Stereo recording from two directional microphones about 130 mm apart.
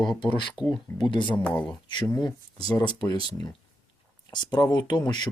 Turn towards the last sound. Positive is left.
turn(degrees=30)  # may be behind; listen again after turning